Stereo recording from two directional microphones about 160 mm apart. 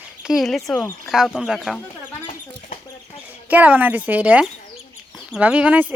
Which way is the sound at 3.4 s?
10° right (ahead or behind).